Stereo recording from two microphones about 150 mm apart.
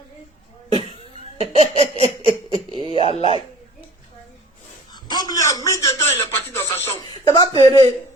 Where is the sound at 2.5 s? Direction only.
30° right (ahead or behind).